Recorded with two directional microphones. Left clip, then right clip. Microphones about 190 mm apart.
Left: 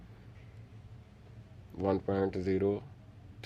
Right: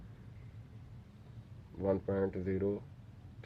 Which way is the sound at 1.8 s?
50° left (ahead or behind).